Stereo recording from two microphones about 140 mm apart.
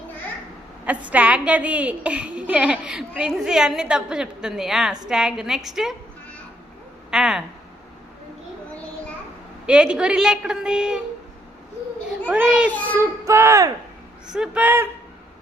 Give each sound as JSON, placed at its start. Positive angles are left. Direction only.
{"t": 0.9, "sound": "a woman's voice", "side_deg": -10}
{"t": 7.1, "sound": "a sound", "side_deg": -5}
{"t": 9.6, "sound": "a woman's voice", "side_deg": -10}
{"t": 12.3, "sound": "a woman's voice", "side_deg": -10}
{"t": 14.3, "sound": "a woman's voice", "side_deg": -5}